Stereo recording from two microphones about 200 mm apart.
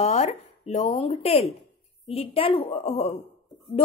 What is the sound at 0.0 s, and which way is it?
A child's voice, 35° left (ahead or behind).